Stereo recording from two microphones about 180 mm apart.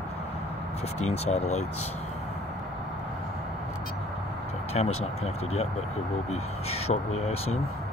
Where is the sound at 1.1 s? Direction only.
35° left (ahead or behind).